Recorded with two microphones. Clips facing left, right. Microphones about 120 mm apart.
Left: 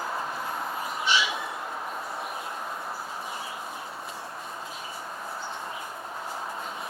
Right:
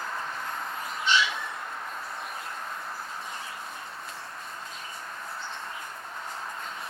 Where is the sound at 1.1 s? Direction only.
10° left (ahead or behind).